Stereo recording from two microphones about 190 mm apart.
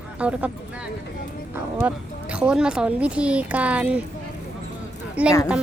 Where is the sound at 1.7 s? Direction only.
5° right (ahead or behind).